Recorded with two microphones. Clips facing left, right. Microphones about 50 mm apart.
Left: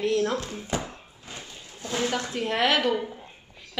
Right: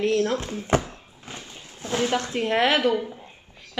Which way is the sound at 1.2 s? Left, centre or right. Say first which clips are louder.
Right 2 dB; right.